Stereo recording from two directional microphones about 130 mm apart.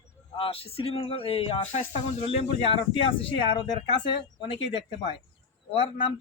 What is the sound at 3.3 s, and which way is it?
Speech, 35° left (ahead or behind).